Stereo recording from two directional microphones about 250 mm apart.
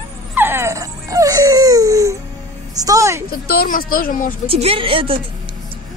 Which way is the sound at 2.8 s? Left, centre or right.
Centre.